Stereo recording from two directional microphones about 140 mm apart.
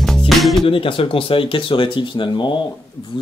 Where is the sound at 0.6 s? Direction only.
40° left (ahead or behind).